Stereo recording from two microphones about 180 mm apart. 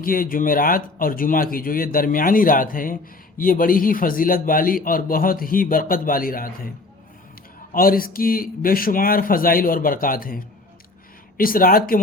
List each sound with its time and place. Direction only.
0.0 s speech: 50° left (ahead or behind)
7.7 s speech: 55° left (ahead or behind)